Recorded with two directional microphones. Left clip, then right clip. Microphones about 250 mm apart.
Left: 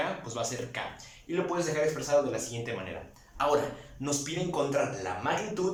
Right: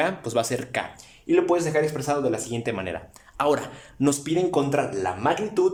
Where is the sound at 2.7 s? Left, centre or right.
Right.